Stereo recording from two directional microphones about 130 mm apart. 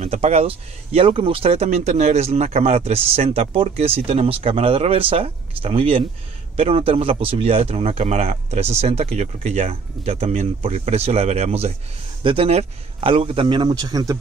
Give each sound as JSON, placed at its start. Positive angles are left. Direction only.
{"t": 0.0, "sound": "speech", "side_deg": -55}
{"t": 12.2, "sound": "a man's voice", "side_deg": -45}